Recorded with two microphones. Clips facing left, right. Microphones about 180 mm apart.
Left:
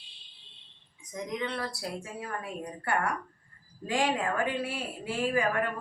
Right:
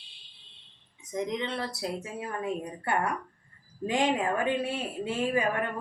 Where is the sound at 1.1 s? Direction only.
25° right (ahead or behind).